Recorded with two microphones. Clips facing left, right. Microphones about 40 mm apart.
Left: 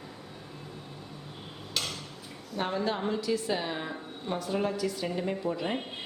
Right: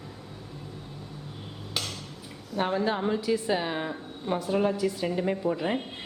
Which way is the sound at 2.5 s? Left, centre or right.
Centre.